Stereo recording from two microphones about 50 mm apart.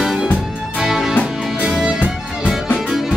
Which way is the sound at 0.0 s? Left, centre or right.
Centre.